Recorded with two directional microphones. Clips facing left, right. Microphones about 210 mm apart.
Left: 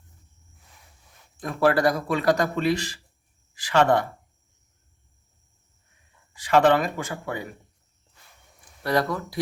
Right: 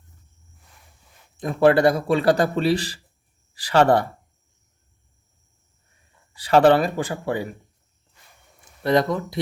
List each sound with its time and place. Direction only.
1.4 s speech: 25° right (ahead or behind)
6.3 s speech: 35° right (ahead or behind)
8.8 s speech: 20° right (ahead or behind)